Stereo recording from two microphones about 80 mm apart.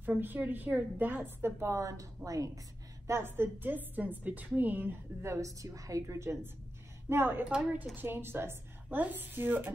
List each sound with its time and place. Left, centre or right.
0.0 s a woman's voice: right
3.1 s a woman's voice: right
5.2 s a woman's voice: right
7.4 s speech: centre
7.9 s a woman's voice: right